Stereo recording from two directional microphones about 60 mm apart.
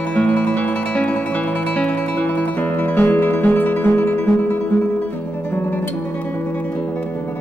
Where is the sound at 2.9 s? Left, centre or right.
Left.